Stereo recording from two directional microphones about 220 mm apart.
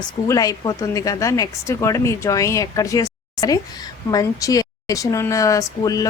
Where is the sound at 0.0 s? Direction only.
15° left (ahead or behind).